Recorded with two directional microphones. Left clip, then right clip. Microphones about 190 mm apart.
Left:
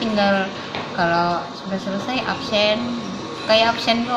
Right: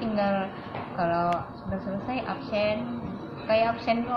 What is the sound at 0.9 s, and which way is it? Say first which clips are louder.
A woman's voice: left 7 dB; 20° left (ahead or behind).